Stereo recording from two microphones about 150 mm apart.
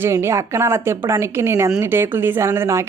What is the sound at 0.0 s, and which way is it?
Speech, 15° right (ahead or behind).